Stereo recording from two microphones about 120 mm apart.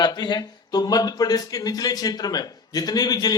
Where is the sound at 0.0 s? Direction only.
35° left (ahead or behind).